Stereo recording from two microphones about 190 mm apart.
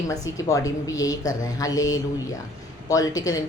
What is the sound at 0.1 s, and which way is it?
A woman's voice, 15° left (ahead or behind).